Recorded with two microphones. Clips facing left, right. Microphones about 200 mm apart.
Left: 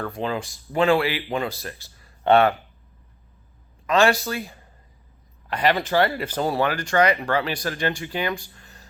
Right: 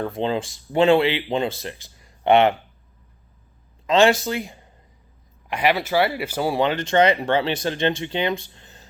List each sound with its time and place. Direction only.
0.0 s speech: 25° right (ahead or behind)
3.8 s speech: 20° right (ahead or behind)
5.5 s speech: 10° right (ahead or behind)